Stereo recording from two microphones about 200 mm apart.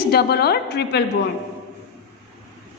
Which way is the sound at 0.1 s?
55° left (ahead or behind).